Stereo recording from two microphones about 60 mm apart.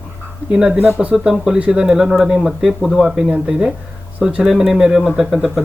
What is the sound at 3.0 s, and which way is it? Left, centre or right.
Speech, centre.